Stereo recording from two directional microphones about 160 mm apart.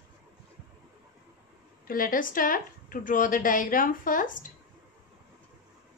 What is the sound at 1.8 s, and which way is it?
Speech, 60° left (ahead or behind).